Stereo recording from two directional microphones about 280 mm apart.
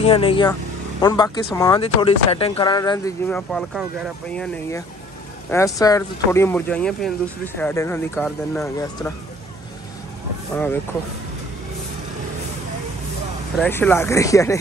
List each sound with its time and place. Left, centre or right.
0.0 s speech: centre
10.5 s speech: centre
13.6 s speech: centre